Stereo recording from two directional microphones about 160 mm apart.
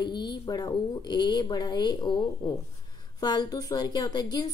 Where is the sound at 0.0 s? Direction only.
30° left (ahead or behind).